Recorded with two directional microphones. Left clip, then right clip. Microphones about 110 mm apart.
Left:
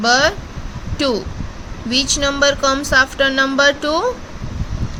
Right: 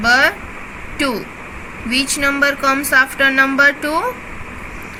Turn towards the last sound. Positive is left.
turn(degrees=55)  # may be behind; listen again after turning